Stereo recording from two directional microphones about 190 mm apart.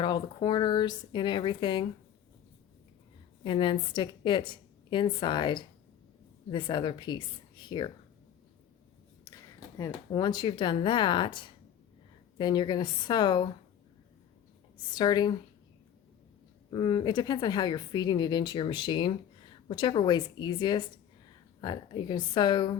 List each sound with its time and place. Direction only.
0.0 s speech: 25° left (ahead or behind)
3.4 s speech: 25° left (ahead or behind)
9.7 s speech: 20° left (ahead or behind)
12.4 s speech: 25° left (ahead or behind)
14.9 s speech: 20° left (ahead or behind)
16.7 s speech: 20° left (ahead or behind)